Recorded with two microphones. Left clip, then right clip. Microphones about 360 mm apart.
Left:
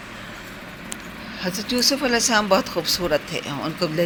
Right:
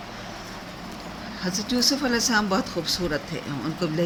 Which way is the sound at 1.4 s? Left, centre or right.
Centre.